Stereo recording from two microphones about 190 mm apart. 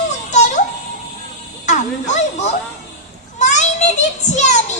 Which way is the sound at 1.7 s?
40° left (ahead or behind).